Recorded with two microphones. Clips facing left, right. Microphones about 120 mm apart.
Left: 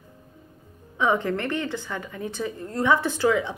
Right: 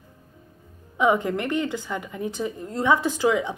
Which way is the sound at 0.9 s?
15° right (ahead or behind).